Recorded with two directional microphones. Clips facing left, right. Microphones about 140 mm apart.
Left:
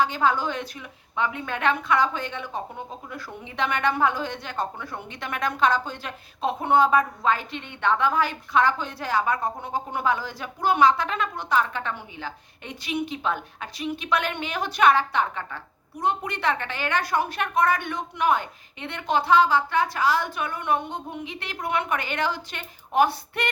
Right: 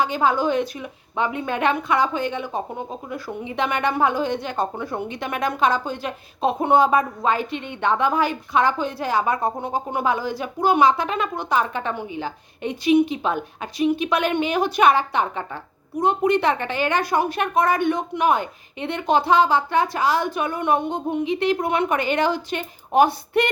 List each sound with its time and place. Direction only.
0.0 s a woman's voice: 10° right (ahead or behind)